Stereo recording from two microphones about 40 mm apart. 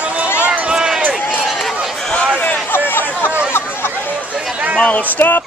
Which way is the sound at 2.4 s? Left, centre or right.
Left.